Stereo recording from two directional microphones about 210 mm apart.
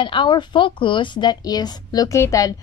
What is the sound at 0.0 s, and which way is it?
A woman's voice, 25° left (ahead or behind).